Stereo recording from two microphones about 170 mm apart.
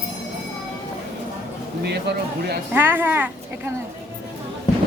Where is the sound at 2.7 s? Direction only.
10° right (ahead or behind).